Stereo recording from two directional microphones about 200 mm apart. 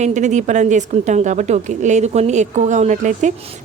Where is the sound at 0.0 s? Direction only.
35° right (ahead or behind).